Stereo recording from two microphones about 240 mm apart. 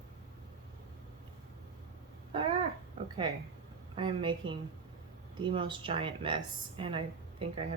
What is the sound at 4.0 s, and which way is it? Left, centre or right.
Speech, centre.